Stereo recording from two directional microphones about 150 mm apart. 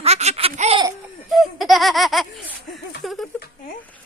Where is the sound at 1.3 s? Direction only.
Centre (ahead or behind).